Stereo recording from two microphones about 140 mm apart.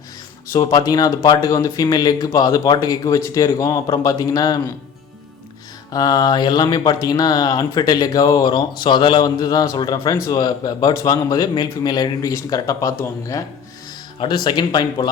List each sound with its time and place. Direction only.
0.5 s speech: 25° left (ahead or behind)
5.9 s speech: 25° left (ahead or behind)
14.2 s speech: 35° left (ahead or behind)